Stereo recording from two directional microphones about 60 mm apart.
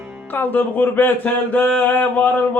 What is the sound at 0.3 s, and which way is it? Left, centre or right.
Speech, left.